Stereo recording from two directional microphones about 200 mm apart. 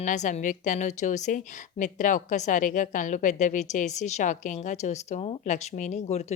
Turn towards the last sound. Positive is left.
turn(degrees=35)  # may be behind; listen again after turning